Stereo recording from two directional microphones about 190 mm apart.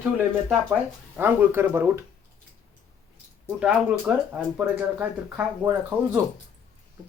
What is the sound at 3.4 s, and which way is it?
Speech, 5° right (ahead or behind).